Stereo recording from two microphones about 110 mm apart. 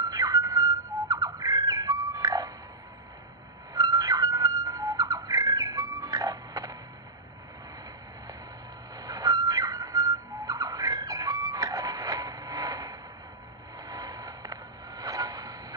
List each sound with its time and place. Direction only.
0.0 s bird: 35° right (ahead or behind)
3.7 s bird: 35° right (ahead or behind)
8.9 s a sound: 35° right (ahead or behind)